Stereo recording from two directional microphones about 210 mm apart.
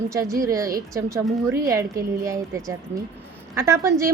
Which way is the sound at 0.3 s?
15° right (ahead or behind).